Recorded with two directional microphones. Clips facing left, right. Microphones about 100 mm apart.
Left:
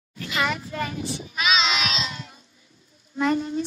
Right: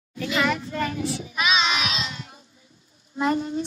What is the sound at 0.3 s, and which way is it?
Speech, 5° left (ahead or behind).